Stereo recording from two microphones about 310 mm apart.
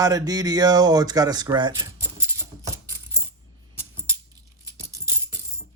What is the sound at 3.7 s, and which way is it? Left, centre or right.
Music, centre.